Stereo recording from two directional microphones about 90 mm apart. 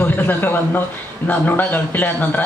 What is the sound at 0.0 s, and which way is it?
A man's voice, 20° left (ahead or behind).